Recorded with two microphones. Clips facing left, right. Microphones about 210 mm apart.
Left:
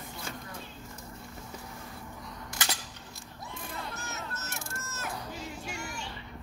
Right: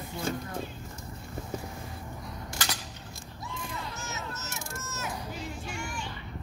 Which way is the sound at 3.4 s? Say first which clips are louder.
Right 2 dB; 55° left (ahead or behind).